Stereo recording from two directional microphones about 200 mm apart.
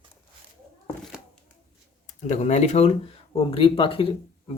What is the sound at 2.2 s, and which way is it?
Speech, 35° left (ahead or behind).